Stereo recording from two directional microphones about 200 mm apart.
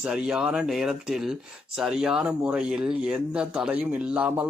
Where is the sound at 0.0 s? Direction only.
5° right (ahead or behind).